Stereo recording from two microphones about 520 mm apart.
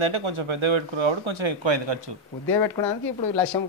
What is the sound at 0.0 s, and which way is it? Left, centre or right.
A man's voice, right.